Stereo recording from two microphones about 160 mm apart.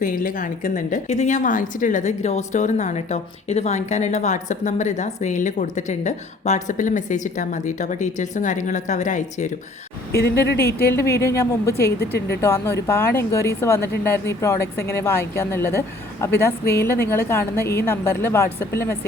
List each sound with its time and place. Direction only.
0.0 s a woman's voice: 60° left (ahead or behind)
10.1 s a woman's voice: 90° left
10.9 s a woman's voice: 15° left (ahead or behind)
11.7 s a woman's voice: 85° left
12.4 s a woman's voice: 20° left (ahead or behind)